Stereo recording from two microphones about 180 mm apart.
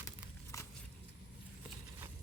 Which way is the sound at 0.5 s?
15° left (ahead or behind).